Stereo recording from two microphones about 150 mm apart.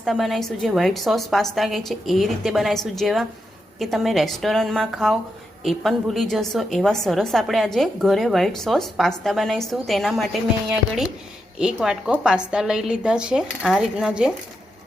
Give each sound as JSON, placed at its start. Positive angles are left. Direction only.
{"t": 0.0, "sound": "a woman's voice", "side_deg": 0}